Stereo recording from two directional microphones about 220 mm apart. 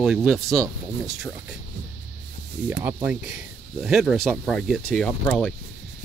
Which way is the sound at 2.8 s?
5° right (ahead or behind).